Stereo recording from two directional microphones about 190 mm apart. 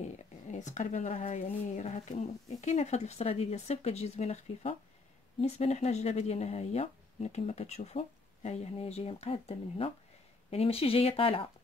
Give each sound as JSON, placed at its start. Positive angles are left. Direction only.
{"t": 0.5, "sound": "speech", "side_deg": 40}